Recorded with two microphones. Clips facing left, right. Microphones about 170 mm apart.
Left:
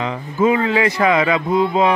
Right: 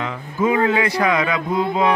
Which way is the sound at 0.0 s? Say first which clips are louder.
Left 4 dB; 20° left (ahead or behind).